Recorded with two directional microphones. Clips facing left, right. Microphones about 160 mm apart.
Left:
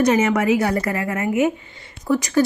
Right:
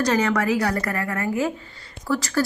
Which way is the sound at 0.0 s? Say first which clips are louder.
Left 4 dB; 20° left (ahead or behind).